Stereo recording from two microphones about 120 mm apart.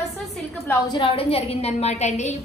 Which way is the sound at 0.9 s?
50° left (ahead or behind).